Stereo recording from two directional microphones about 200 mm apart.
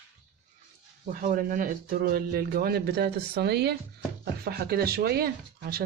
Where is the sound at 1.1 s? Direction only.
45° right (ahead or behind).